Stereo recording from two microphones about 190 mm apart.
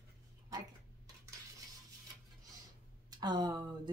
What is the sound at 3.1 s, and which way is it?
Speech, 20° right (ahead or behind).